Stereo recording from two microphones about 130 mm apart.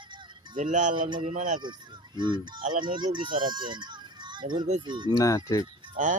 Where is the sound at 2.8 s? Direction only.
35° right (ahead or behind).